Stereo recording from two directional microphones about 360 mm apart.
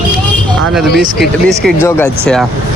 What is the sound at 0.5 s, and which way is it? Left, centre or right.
Speech, centre.